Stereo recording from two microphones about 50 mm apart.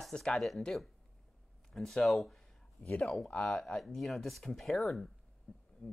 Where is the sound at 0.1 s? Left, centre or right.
Centre.